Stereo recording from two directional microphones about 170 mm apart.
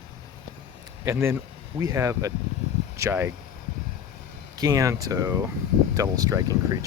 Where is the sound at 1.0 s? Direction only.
15° right (ahead or behind).